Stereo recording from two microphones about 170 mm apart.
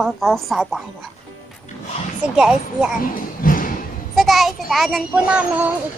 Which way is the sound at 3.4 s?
55° left (ahead or behind).